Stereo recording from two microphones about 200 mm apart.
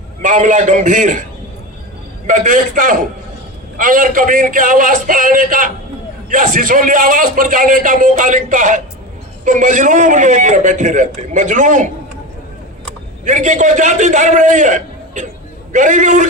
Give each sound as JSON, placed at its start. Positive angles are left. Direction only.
{"t": 0.2, "sound": "a man's voice", "side_deg": -40}
{"t": 2.2, "sound": "a man's voice", "side_deg": -40}
{"t": 13.2, "sound": "a man's voice", "side_deg": -40}